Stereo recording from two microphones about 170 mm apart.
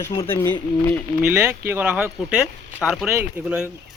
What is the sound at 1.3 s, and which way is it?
Speech, 15° right (ahead or behind).